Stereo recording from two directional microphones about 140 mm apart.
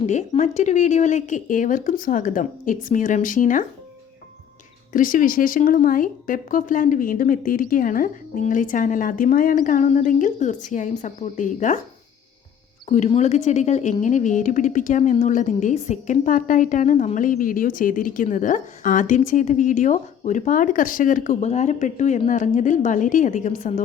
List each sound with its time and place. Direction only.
0.0 s speech: 60° left (ahead or behind)
4.9 s speech: 75° left (ahead or behind)
12.9 s speech: 55° left (ahead or behind)